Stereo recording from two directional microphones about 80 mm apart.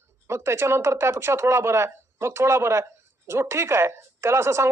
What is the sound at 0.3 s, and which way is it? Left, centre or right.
Speech, right.